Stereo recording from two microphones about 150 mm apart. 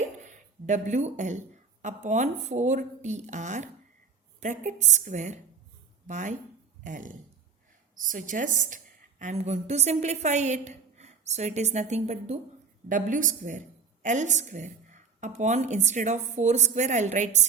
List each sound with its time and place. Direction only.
0.6 s a woman's voice: 55° right (ahead or behind)
12.9 s a woman's voice: 60° right (ahead or behind)